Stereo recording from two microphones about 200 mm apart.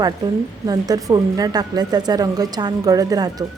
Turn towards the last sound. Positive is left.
turn(degrees=-20)  # may be behind; listen again after turning